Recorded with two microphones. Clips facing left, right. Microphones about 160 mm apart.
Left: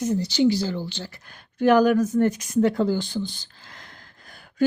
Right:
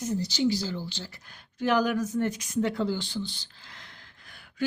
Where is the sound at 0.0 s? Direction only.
65° left (ahead or behind).